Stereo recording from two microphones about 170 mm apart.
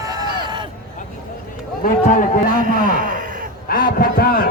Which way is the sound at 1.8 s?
50° left (ahead or behind).